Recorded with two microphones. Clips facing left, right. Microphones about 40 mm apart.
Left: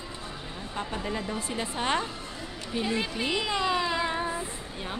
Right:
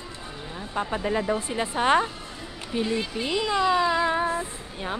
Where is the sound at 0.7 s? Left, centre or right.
Centre.